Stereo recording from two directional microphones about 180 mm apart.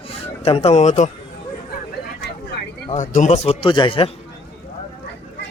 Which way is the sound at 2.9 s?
45° left (ahead or behind).